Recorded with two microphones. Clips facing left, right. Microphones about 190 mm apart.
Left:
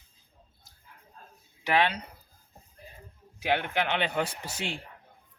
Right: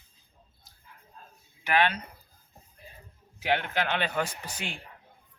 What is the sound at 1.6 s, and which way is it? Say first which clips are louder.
Speech: even; 30° left (ahead or behind).